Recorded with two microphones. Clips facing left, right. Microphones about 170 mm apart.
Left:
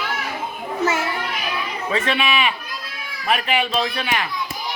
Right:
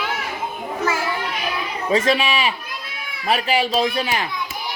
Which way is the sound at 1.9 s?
35° right (ahead or behind).